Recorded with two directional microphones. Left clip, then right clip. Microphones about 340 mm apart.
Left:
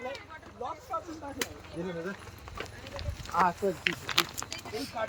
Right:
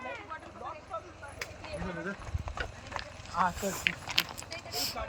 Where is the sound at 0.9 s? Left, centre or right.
Left.